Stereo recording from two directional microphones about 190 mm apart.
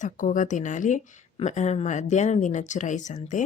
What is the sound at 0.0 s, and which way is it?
Speech, 40° left (ahead or behind).